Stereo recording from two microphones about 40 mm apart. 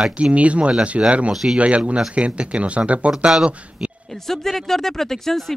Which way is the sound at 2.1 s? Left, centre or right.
Right.